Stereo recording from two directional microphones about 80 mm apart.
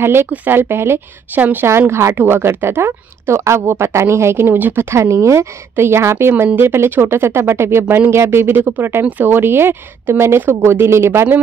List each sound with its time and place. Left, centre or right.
0.0 s speech: right
1.7 s speech: right